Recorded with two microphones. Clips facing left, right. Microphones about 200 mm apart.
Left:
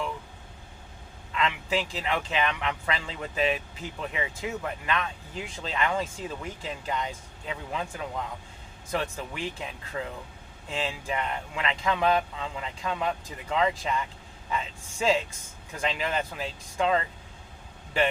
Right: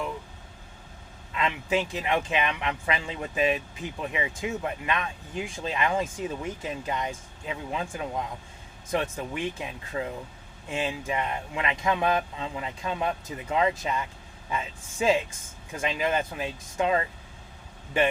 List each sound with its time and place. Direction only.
1.3 s a man's voice: 20° right (ahead or behind)